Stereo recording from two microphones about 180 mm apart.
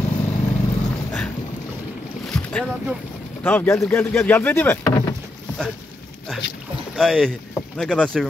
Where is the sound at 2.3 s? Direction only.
10° left (ahead or behind).